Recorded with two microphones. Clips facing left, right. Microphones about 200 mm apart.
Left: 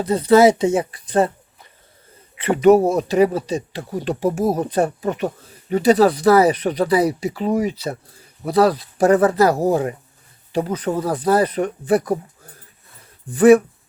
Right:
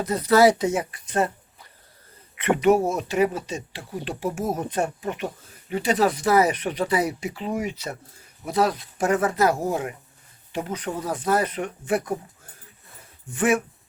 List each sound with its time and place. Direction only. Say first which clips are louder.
0.0 s speech: left 5 dB; 30° left (ahead or behind)
2.4 s speech: left 6 dB; 35° left (ahead or behind)
13.3 s speech: left 11 dB; 35° left (ahead or behind)